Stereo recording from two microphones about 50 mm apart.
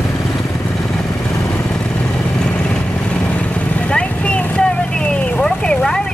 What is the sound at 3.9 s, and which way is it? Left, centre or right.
Vehicle, left.